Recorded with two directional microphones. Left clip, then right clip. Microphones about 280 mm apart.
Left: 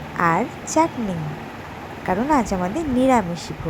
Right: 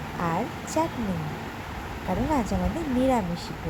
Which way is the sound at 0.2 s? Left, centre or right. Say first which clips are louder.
Left 9 dB; centre.